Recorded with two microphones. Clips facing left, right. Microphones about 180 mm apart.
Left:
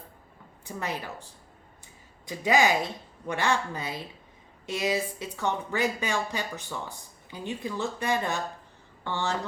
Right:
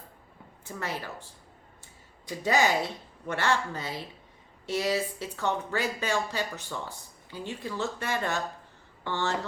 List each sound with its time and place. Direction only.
0.8 s speech: 15° left (ahead or behind)
2.4 s speech: 15° left (ahead or behind)